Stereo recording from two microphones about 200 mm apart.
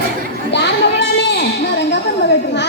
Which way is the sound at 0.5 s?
60° left (ahead or behind).